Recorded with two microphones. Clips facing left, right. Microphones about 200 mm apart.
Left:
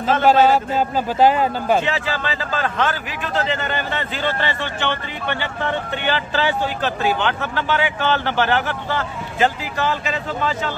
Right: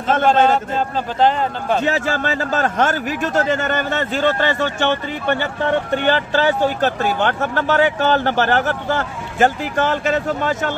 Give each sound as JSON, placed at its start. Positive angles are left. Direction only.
{"t": 0.2, "sound": "a man's voice", "side_deg": 5}
{"t": 1.9, "sound": "speech", "side_deg": -45}